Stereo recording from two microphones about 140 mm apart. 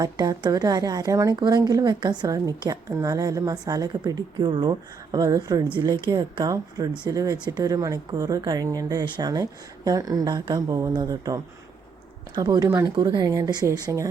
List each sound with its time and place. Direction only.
0.0 s a woman's voice: 25° right (ahead or behind)
12.6 s speech: 15° right (ahead or behind)
13.0 s a woman's voice: 30° right (ahead or behind)